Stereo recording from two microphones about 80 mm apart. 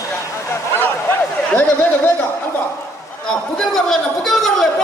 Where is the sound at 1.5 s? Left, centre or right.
Left.